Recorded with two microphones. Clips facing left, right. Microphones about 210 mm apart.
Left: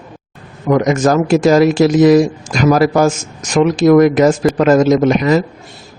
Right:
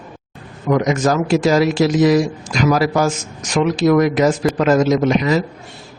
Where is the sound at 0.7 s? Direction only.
50° left (ahead or behind).